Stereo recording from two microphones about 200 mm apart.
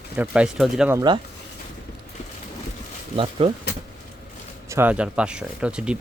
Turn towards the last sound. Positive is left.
turn(degrees=-5)  # may be behind; listen again after turning